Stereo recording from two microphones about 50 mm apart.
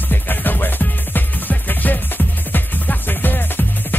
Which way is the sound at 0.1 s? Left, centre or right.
Left.